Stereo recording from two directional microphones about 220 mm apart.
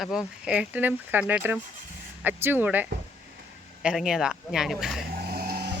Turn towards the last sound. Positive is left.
turn(degrees=-45)  # may be behind; listen again after turning